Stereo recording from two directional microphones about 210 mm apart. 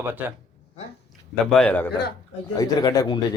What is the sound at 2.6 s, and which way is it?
Speech, 15° left (ahead or behind).